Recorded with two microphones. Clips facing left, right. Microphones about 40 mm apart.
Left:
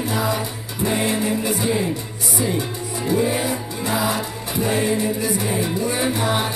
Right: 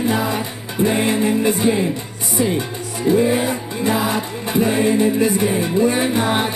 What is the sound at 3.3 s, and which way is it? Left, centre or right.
Music, right.